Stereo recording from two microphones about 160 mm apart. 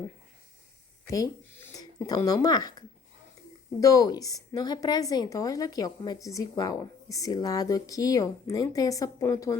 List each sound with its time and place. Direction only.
1.0 s a woman's voice: 20° left (ahead or behind)